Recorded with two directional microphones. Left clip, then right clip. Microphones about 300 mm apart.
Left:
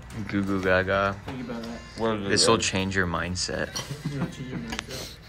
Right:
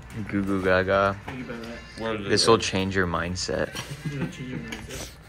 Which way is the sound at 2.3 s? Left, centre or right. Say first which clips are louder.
Right 3 dB; centre.